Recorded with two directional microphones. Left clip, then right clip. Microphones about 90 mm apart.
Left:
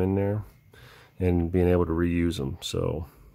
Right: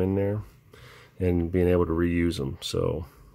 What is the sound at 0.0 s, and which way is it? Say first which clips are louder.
Speech: even; 20° left (ahead or behind).